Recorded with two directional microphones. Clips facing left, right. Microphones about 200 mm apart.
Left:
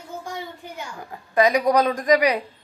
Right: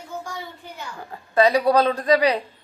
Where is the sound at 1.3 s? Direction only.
15° left (ahead or behind).